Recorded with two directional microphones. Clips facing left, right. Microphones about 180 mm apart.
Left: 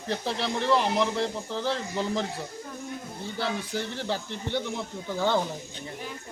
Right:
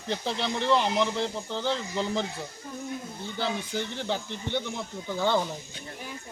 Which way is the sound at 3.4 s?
Centre (ahead or behind).